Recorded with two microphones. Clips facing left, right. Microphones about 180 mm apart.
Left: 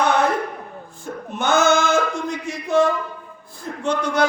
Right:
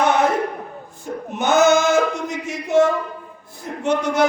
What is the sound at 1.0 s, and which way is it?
Male singing, 15° right (ahead or behind).